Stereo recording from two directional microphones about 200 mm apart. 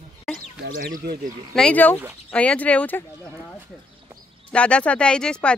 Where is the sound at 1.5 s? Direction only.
5° left (ahead or behind).